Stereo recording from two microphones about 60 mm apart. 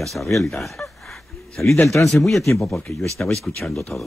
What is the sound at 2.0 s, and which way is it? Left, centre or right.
Speech, left.